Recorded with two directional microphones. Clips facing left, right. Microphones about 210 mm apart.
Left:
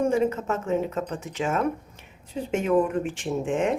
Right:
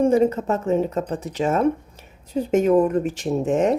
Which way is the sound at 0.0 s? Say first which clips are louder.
Right 5 dB; 35° right (ahead or behind).